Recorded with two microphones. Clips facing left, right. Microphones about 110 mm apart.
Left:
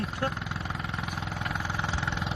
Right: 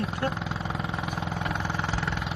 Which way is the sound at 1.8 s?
15° left (ahead or behind).